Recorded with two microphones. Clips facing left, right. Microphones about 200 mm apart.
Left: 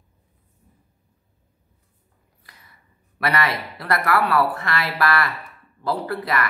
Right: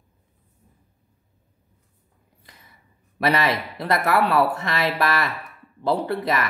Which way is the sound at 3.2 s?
25° right (ahead or behind).